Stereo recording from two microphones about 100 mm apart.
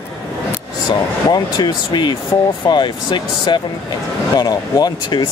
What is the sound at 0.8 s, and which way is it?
Speech, 45° left (ahead or behind).